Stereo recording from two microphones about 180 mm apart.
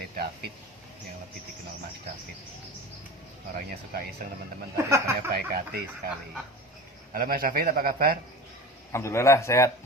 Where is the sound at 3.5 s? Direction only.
55° right (ahead or behind).